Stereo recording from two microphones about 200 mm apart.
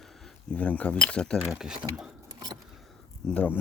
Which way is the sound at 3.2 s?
5° left (ahead or behind).